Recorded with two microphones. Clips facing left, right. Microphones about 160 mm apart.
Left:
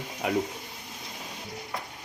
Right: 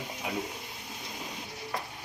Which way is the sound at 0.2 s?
75° left (ahead or behind).